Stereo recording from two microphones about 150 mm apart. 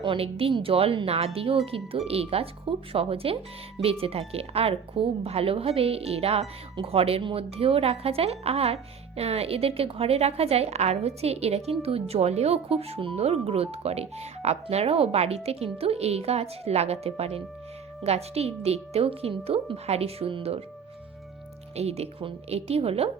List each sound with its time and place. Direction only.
0.0 s a woman's voice: 35° right (ahead or behind)
21.8 s a woman's voice: 45° right (ahead or behind)